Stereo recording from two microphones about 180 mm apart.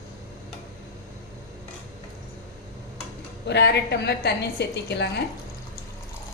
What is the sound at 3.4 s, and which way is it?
A woman's voice, 75° left (ahead or behind).